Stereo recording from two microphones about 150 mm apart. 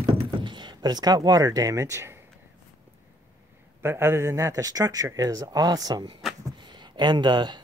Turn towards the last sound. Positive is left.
turn(degrees=-30)  # may be behind; listen again after turning